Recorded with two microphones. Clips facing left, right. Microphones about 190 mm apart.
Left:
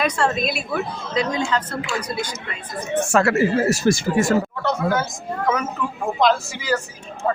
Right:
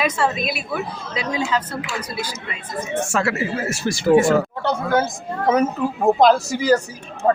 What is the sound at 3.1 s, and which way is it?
Speech, 50° left (ahead or behind).